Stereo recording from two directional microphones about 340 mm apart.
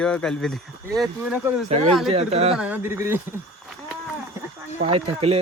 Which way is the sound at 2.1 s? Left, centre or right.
Centre.